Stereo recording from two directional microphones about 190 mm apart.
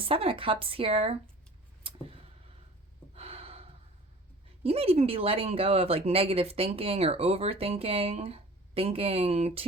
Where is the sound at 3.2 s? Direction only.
30° right (ahead or behind).